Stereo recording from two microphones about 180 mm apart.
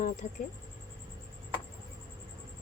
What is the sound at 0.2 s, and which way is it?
Speech, 40° left (ahead or behind).